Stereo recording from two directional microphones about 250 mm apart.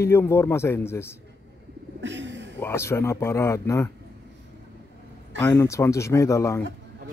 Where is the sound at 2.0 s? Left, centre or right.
Right.